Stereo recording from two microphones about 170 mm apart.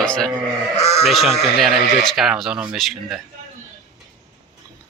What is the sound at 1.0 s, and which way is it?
Speech, centre (ahead or behind).